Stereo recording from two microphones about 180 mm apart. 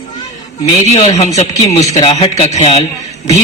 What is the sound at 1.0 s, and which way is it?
A man's voice, 40° left (ahead or behind).